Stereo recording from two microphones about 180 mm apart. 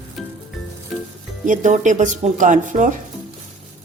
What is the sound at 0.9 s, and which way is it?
Music, centre (ahead or behind).